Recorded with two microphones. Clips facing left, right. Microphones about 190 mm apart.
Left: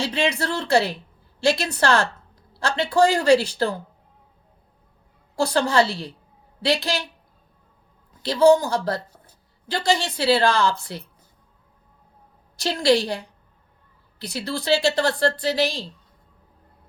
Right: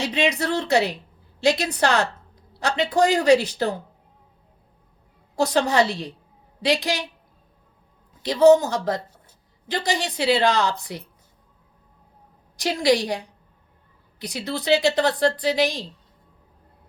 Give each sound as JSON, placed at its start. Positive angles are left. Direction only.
{"t": 0.0, "sound": "speech", "side_deg": -15}
{"t": 5.4, "sound": "speech", "side_deg": -20}
{"t": 8.2, "sound": "speech", "side_deg": -20}
{"t": 12.5, "sound": "speech", "side_deg": -15}
{"t": 14.2, "sound": "speech", "side_deg": -15}